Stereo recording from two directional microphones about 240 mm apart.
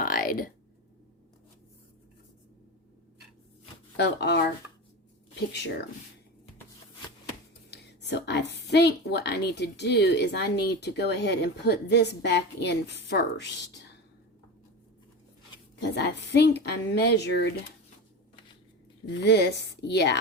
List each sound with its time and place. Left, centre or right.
0.0 s a sound: left
3.9 s a woman's voice: left
5.5 s a woman's voice: left
7.7 s a woman's voice: left
16.0 s a woman's voice: left
19.2 s a woman's voice: left